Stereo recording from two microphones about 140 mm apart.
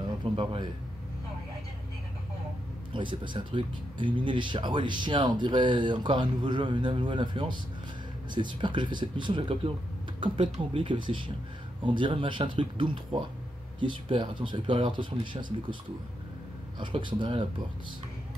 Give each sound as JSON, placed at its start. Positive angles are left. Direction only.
{"t": 0.2, "sound": "a man's voice", "side_deg": -35}
{"t": 2.9, "sound": "speech", "side_deg": -35}
{"t": 16.8, "sound": "speech", "side_deg": -35}